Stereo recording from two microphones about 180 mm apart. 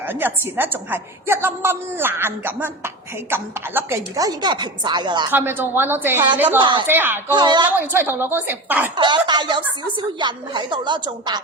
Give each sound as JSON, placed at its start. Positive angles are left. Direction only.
{"t": 0.1, "sound": "a woman's voice", "side_deg": -10}
{"t": 5.3, "sound": "a woman's voice", "side_deg": -10}
{"t": 6.6, "sound": "a woman's voice", "side_deg": -25}
{"t": 6.8, "sound": "a woman's voice", "side_deg": -10}
{"t": 7.3, "sound": "a woman's voice", "side_deg": -25}
{"t": 7.8, "sound": "a woman's voice", "side_deg": -10}
{"t": 9.0, "sound": "a woman's voice", "side_deg": -25}